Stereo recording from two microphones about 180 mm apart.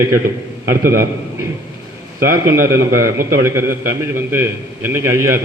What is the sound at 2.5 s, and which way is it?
A man's voice, 15° right (ahead or behind).